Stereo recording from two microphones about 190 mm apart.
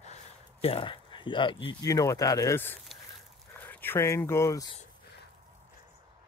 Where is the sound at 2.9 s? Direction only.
5° left (ahead or behind).